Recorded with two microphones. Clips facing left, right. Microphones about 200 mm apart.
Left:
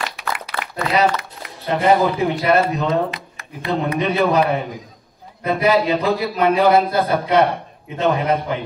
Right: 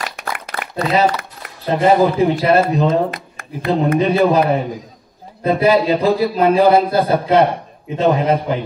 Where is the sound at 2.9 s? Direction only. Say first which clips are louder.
Right 3 dB; 50° right (ahead or behind).